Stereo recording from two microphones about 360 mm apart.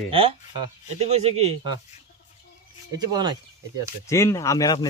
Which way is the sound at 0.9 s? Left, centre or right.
Centre.